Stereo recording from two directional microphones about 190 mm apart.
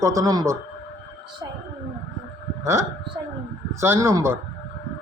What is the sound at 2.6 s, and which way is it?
A man's voice, 15° right (ahead or behind).